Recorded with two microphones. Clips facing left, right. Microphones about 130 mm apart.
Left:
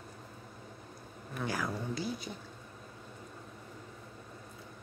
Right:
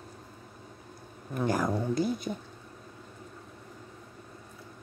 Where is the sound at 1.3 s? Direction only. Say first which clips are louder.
Right 8 dB; 45° right (ahead or behind).